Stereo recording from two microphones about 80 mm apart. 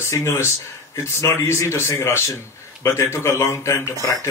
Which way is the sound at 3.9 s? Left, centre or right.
Right.